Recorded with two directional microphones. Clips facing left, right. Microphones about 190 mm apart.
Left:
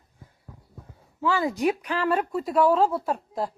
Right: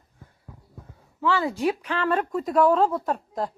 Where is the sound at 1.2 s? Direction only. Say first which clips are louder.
Even; 15° left (ahead or behind).